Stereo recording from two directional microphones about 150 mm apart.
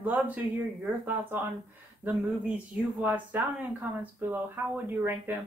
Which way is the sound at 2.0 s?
10° right (ahead or behind).